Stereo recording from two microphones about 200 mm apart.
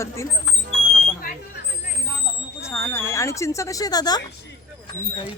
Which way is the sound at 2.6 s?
15° left (ahead or behind).